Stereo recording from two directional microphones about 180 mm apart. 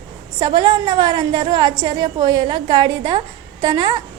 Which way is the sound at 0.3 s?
25° right (ahead or behind).